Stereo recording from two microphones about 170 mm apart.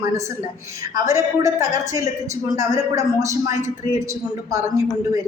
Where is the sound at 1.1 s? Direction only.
15° right (ahead or behind).